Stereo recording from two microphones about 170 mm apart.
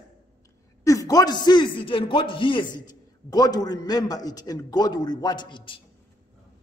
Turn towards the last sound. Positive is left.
turn(degrees=30)  # may be behind; listen again after turning